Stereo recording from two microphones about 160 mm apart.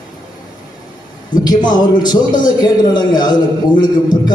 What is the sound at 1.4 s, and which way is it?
A man's voice, 25° left (ahead or behind).